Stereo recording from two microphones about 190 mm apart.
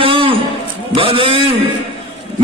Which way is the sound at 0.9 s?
30° right (ahead or behind).